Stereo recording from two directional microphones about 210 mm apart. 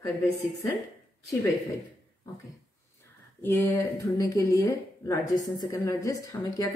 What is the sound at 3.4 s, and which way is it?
Speech, 10° left (ahead or behind).